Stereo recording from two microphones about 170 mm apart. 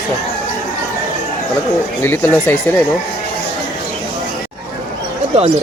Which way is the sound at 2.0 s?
15° left (ahead or behind).